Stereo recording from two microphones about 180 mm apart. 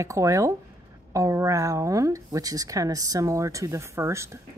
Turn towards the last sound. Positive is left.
turn(degrees=-15)  # may be behind; listen again after turning